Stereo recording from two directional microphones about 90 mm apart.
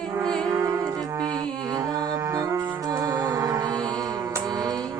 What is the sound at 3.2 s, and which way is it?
Music, 45° right (ahead or behind).